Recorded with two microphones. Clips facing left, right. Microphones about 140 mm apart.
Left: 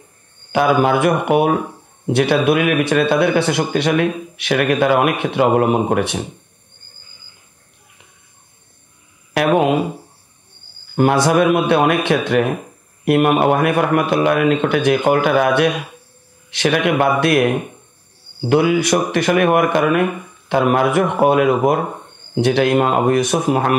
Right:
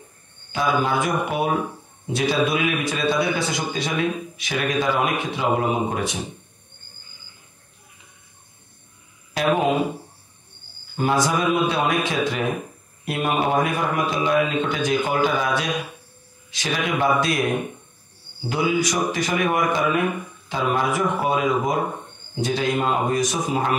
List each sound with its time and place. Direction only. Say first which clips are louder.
0.5 s speech: left 7 dB; 65° left (ahead or behind)
9.3 s a sound: left 6 dB; 65° left (ahead or behind)
11.0 s speech: left 7 dB; 65° left (ahead or behind)